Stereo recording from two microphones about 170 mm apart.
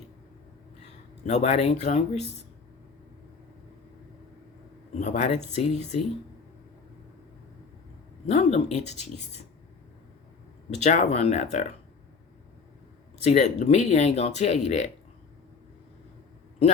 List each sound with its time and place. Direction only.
1.2 s speech: 45° left (ahead or behind)
4.9 s speech: 45° left (ahead or behind)
8.3 s speech: 40° left (ahead or behind)
10.8 s speech: 45° left (ahead or behind)
13.2 s speech: 45° left (ahead or behind)